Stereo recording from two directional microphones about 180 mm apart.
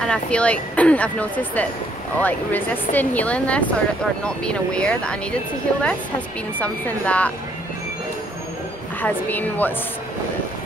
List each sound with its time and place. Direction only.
0.0 s speech: 5° left (ahead or behind)
9.0 s speech: 10° left (ahead or behind)